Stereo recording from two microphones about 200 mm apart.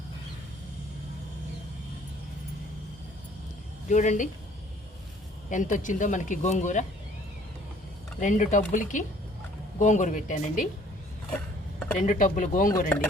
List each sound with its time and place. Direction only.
3.8 s speech: 35° left (ahead or behind)
5.5 s speech: 40° left (ahead or behind)
8.2 s speech: 40° left (ahead or behind)
11.9 s speech: 40° left (ahead or behind)